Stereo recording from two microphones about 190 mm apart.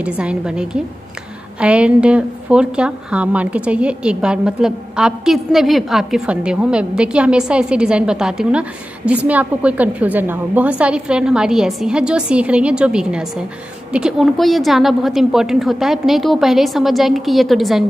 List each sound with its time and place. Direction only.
0.0 s a woman's voice: 5° right (ahead or behind)